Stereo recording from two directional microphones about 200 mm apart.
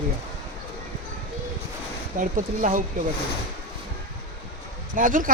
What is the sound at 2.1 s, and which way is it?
Speech, 40° right (ahead or behind).